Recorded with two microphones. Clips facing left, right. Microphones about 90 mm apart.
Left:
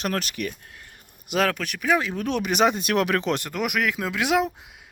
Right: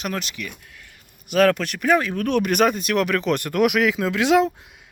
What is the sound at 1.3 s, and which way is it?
Speech, 5° left (ahead or behind).